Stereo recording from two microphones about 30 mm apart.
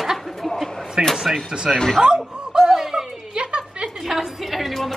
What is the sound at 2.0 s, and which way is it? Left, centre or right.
Snicker, right.